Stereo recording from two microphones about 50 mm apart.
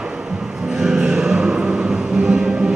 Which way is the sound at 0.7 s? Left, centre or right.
Centre.